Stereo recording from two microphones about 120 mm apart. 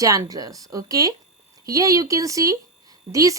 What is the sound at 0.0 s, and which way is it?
A woman's voice, 25° right (ahead or behind).